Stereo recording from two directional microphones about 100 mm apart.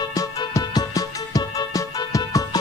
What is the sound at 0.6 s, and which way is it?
Music, 35° left (ahead or behind).